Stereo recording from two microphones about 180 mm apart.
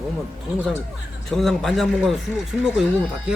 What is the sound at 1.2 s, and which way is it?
Speech, centre (ahead or behind).